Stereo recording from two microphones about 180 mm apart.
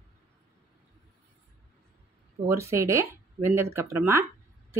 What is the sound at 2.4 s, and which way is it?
Speech, 15° right (ahead or behind).